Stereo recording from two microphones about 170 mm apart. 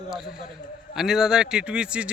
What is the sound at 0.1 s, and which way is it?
A man's voice, centre (ahead or behind).